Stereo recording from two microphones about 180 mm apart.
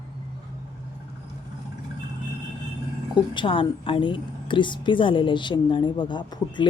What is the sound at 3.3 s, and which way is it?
A woman's voice, 30° left (ahead or behind).